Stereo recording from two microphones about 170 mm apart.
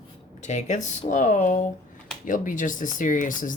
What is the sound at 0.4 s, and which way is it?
Speech, 45° left (ahead or behind).